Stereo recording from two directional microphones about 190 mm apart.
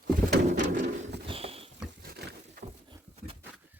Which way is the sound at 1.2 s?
30° right (ahead or behind).